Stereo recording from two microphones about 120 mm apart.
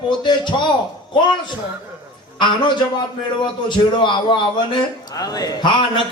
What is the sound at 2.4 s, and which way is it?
A man's voice, 40° left (ahead or behind).